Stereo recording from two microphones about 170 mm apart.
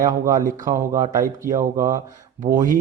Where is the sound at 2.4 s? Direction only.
50° right (ahead or behind).